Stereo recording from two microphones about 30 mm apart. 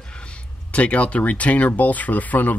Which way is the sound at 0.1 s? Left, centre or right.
Left.